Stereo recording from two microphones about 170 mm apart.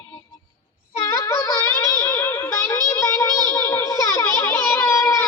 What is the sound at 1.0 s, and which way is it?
Child singing, 15° left (ahead or behind).